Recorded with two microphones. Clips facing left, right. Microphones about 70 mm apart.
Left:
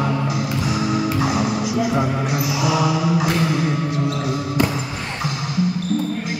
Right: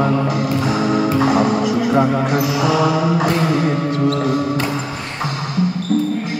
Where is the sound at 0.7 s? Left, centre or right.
Right.